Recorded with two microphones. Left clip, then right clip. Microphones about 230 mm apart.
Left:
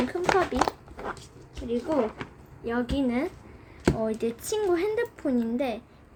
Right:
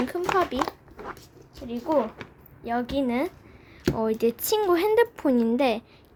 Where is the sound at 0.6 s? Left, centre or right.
Centre.